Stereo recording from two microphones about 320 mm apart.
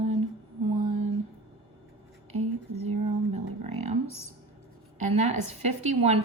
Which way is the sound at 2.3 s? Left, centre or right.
Right.